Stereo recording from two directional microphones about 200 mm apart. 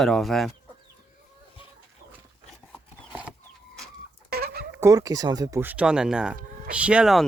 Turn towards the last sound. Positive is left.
turn(degrees=-5)  # may be behind; listen again after turning